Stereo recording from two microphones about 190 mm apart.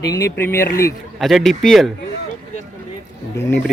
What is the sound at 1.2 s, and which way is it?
Speech, centre (ahead or behind).